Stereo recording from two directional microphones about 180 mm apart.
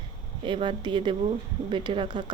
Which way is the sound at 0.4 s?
30° right (ahead or behind).